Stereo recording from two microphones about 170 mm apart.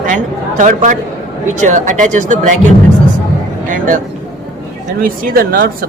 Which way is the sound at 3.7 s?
50° right (ahead or behind).